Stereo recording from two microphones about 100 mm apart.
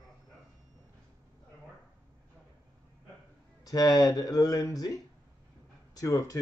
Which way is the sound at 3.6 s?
40° left (ahead or behind).